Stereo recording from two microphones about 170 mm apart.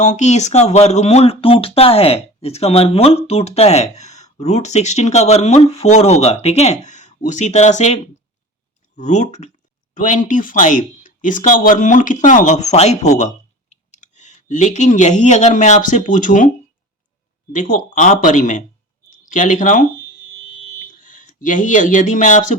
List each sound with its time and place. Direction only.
0.0 s speech: 45° left (ahead or behind)
17.5 s speech: 50° left (ahead or behind)
21.0 s a man's voice: 50° left (ahead or behind)